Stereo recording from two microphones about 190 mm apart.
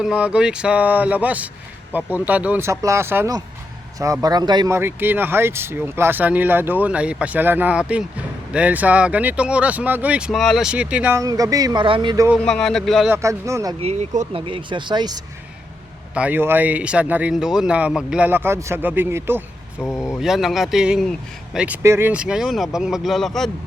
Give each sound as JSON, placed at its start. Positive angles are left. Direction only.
{"t": 0.0, "sound": "speech", "side_deg": -5}
{"t": 12.5, "sound": "speech", "side_deg": 0}
{"t": 13.1, "sound": "speech", "side_deg": -15}
{"t": 13.8, "sound": "speech", "side_deg": -35}
{"t": 14.4, "sound": "speech", "side_deg": -25}
{"t": 16.1, "sound": "speech", "side_deg": -10}
{"t": 19.8, "sound": "speech", "side_deg": 15}
{"t": 20.1, "sound": "speech", "side_deg": 0}